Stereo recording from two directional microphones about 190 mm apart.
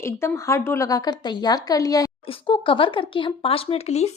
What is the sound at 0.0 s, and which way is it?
A woman's voice, 15° left (ahead or behind).